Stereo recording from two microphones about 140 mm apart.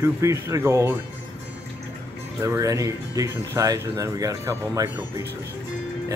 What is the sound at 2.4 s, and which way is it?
Speech, 20° right (ahead or behind).